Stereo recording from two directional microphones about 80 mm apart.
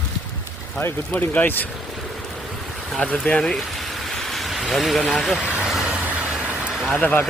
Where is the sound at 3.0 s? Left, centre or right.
Centre.